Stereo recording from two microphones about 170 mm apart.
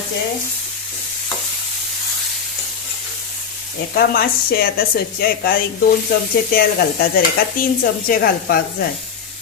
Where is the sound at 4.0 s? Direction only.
60° left (ahead or behind).